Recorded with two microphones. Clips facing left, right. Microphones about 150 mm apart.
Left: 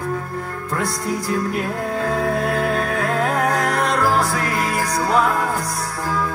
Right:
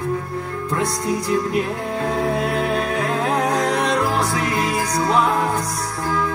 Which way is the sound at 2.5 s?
20° right (ahead or behind).